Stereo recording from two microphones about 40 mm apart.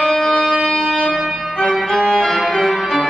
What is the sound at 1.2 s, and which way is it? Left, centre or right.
Music, centre.